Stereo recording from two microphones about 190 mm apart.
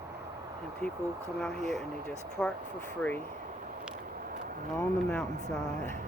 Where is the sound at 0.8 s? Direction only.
5° left (ahead or behind).